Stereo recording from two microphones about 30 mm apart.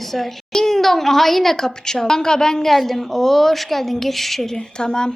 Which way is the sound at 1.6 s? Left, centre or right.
Centre.